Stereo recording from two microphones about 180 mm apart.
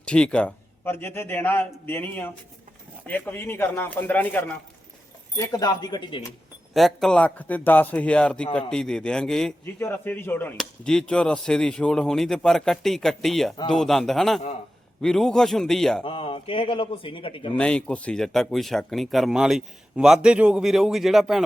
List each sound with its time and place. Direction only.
0.0 s a man's voice: 5° left (ahead or behind)
5.4 s a man's voice: 20° left (ahead or behind)
6.7 s a man's voice: centre (ahead or behind)
16.0 s a man's voice: 30° left (ahead or behind)
17.6 s speech: 5° left (ahead or behind)